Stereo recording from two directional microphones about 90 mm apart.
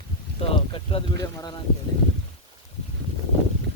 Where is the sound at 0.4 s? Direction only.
90° left.